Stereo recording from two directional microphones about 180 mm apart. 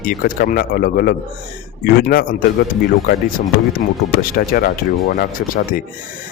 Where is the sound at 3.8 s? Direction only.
55° left (ahead or behind).